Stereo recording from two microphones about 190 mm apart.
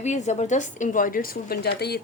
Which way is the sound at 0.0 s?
35° left (ahead or behind).